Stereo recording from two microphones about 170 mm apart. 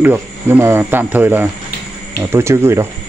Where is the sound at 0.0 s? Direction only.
10° right (ahead or behind).